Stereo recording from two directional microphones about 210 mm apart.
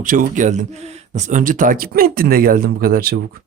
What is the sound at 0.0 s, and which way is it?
Speech, 40° right (ahead or behind).